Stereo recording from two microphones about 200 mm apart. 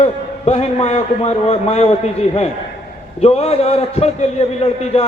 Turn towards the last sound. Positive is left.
turn(degrees=30)  # may be behind; listen again after turning